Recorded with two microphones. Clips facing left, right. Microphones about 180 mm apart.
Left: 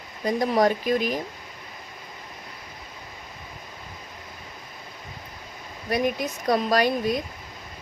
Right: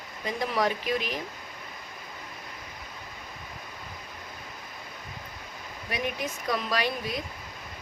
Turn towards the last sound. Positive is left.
turn(degrees=45)  # may be behind; listen again after turning